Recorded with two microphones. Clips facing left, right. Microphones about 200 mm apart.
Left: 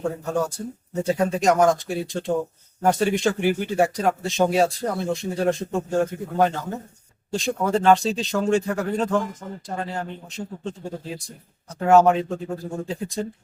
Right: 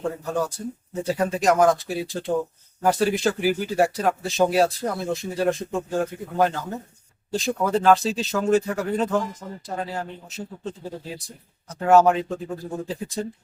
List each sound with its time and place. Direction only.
0.0 s speech: centre (ahead or behind)